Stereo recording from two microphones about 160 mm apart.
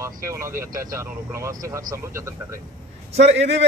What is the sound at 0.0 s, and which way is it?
Speech, 20° right (ahead or behind).